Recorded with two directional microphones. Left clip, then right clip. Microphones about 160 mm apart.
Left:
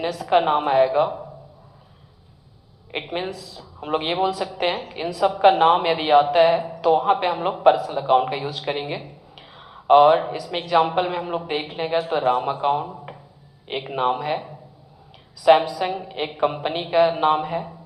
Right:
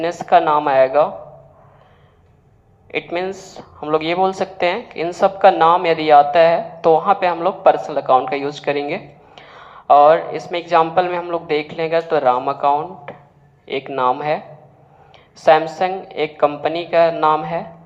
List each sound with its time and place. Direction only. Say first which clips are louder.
0.0 s a woman's voice: right 5 dB; 25° right (ahead or behind)
2.9 s a woman's voice: right 6 dB; 25° right (ahead or behind)
15.4 s a woman's voice: right 3 dB; 25° right (ahead or behind)